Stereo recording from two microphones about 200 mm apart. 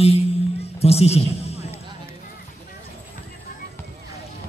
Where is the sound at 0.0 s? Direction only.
30° left (ahead or behind).